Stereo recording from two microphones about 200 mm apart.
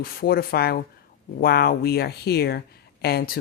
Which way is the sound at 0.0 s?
50° left (ahead or behind).